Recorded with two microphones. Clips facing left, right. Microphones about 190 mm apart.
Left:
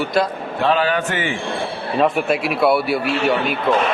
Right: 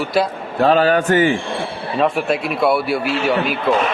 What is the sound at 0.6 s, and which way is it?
Speech, 40° right (ahead or behind).